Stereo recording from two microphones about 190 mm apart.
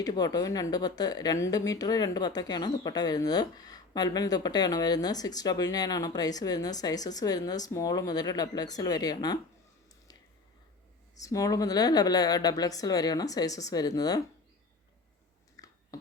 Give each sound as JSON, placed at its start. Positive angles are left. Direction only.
{"t": 0.0, "sound": "speech", "side_deg": 20}
{"t": 11.2, "sound": "speech", "side_deg": 15}
{"t": 15.6, "sound": "chewing", "side_deg": 20}